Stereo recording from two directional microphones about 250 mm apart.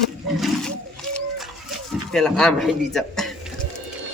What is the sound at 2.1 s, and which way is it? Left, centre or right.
Speech, centre.